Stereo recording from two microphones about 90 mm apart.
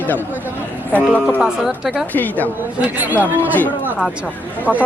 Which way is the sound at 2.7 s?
15° right (ahead or behind).